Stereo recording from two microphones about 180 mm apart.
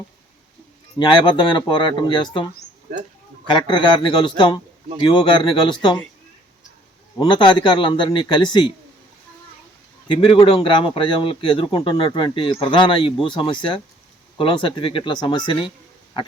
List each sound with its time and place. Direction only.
0.9 s a man's voice: 25° left (ahead or behind)
3.7 s a man's voice: 25° left (ahead or behind)
7.2 s a man's voice: 25° left (ahead or behind)
10.1 s a man's voice: 25° left (ahead or behind)